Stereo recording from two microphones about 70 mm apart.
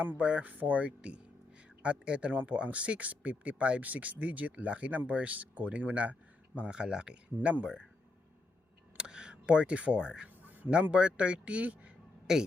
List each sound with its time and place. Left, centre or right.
0.0 s speech: centre
9.0 s camera: centre
10.2 s a sound: right
10.9 s speech: centre
12.3 s speech: centre